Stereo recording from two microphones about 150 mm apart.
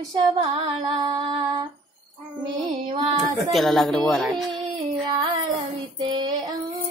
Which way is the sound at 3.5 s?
Centre (ahead or behind).